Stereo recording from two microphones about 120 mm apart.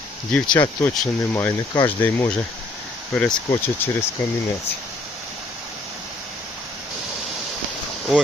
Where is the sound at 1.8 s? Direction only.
15° left (ahead or behind).